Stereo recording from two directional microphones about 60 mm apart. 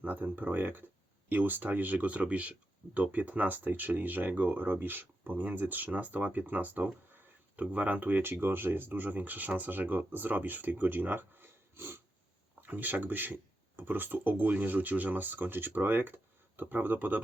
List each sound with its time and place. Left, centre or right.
0.0 s speech: right
12.6 s speech: right